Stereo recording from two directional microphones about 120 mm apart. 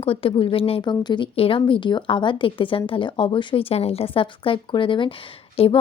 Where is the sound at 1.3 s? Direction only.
50° left (ahead or behind).